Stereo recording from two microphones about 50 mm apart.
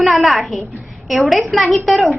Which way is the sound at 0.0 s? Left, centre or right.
Centre.